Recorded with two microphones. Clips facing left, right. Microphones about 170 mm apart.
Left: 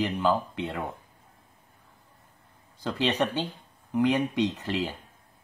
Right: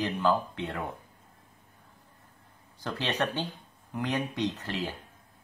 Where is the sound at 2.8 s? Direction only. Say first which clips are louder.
Left 4 dB; 15° left (ahead or behind).